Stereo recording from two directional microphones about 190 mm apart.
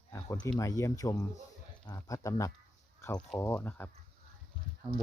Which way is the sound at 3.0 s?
15° left (ahead or behind).